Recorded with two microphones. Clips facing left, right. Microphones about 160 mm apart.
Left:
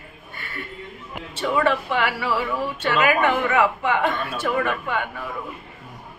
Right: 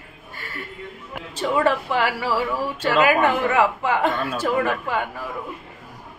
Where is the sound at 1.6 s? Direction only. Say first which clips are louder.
Right 1 dB; 35° right (ahead or behind).